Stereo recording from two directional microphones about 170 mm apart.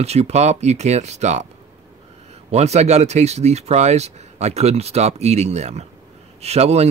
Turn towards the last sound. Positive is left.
turn(degrees=-40)  # may be behind; listen again after turning